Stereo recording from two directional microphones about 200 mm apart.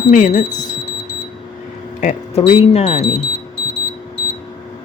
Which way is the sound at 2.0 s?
40° left (ahead or behind).